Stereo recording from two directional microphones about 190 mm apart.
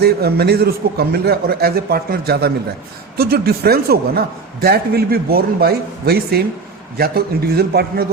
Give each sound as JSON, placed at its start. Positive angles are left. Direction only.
{"t": 0.0, "sound": "a man's voice", "side_deg": -55}